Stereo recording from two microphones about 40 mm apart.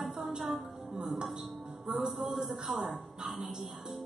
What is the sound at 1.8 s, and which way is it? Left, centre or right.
Music, centre.